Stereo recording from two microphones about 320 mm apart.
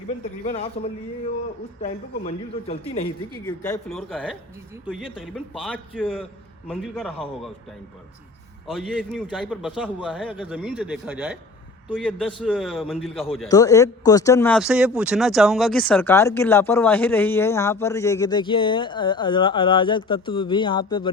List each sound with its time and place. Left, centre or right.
0.4 s speech: centre
3.4 s a man's voice: centre
8.7 s a man's voice: centre
13.5 s speech: centre